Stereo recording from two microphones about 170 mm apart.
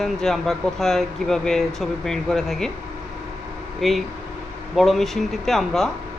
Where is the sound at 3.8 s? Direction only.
Centre (ahead or behind).